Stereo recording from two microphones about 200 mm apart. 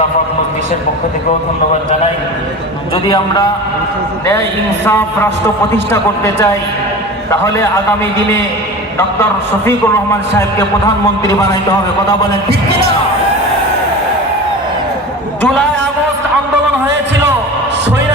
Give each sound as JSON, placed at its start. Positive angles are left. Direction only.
{"t": 2.9, "sound": "a man's voice", "side_deg": 20}
{"t": 4.9, "sound": "a man's voice", "side_deg": 10}
{"t": 9.6, "sound": "a man's voice", "side_deg": 15}